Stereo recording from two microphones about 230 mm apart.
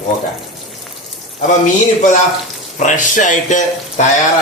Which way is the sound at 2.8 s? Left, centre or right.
Left.